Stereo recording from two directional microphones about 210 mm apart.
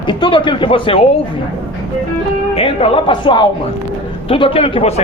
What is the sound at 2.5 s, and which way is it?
Speech, 25° left (ahead or behind).